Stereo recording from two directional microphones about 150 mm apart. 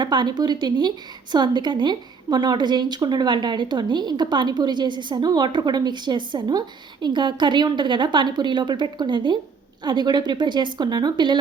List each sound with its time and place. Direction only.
0.0 s a woman's voice: 30° right (ahead or behind)